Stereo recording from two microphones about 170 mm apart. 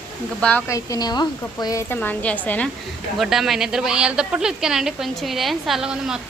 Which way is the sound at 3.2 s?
Centre (ahead or behind).